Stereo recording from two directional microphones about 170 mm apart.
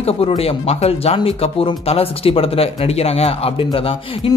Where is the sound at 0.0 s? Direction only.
35° left (ahead or behind).